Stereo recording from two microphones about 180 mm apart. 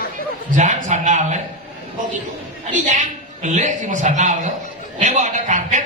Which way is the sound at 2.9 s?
45° right (ahead or behind).